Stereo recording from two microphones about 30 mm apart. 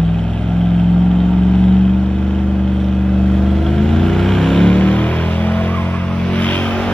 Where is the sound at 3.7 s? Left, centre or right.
Centre.